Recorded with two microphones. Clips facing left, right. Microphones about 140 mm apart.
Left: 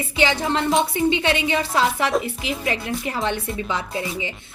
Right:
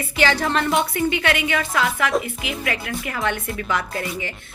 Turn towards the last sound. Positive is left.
turn(degrees=15)  # may be behind; listen again after turning